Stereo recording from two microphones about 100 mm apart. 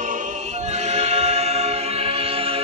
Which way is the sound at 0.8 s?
90° right.